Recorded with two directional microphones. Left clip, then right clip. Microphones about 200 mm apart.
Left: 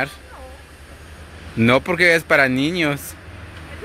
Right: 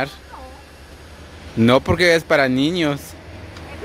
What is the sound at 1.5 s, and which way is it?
Speech, 15° right (ahead or behind).